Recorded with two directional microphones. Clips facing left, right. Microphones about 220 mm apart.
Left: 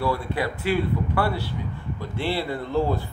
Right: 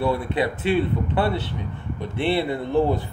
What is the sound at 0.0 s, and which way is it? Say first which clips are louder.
Speech: right 3 dB; 20° right (ahead or behind).